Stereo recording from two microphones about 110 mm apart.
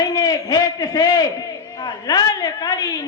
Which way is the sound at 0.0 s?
35° left (ahead or behind).